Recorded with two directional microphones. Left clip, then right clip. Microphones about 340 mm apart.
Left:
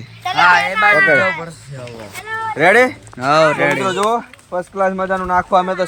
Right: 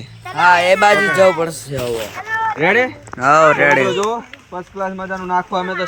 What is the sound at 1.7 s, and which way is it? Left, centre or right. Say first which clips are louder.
Speech: right 10 dB; right.